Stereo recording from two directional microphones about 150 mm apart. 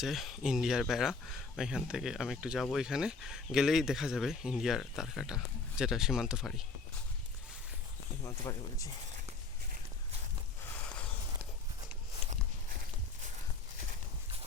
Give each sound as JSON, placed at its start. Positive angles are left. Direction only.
{"t": 0.0, "sound": "speech", "side_deg": 0}
{"t": 8.2, "sound": "speech", "side_deg": 25}